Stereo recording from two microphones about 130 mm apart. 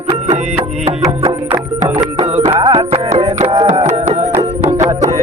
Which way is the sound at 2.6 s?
35° right (ahead or behind).